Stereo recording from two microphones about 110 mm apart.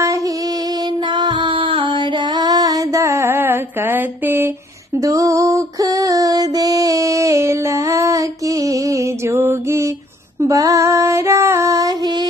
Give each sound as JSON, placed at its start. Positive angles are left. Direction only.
{"t": 1.0, "sound": "music", "side_deg": -45}
{"t": 4.9, "sound": "female singing", "side_deg": -30}